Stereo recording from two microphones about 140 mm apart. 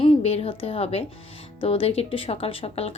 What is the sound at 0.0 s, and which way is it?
A woman's voice, 45° left (ahead or behind).